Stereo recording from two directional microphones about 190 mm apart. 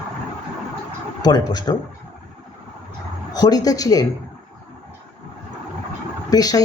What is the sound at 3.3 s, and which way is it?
Speech, 20° left (ahead or behind).